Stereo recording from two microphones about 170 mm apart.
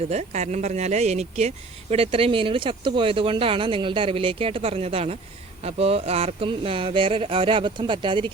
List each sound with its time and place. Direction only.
0.1 s speech: 40° right (ahead or behind)